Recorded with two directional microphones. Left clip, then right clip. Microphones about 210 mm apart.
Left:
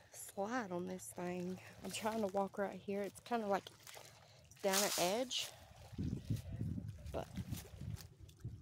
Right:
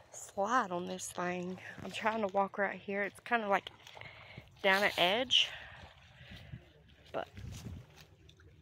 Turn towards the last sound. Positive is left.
turn(degrees=0)  # may be behind; listen again after turning